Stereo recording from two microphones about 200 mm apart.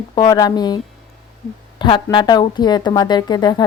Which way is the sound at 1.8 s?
20° left (ahead or behind).